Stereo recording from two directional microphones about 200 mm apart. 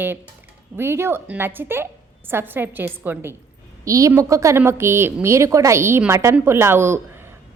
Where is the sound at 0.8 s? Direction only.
10° right (ahead or behind).